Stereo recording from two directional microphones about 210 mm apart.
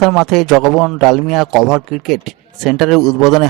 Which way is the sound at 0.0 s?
Centre (ahead or behind).